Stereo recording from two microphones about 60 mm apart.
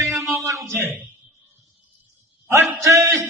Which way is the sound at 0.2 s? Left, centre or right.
Right.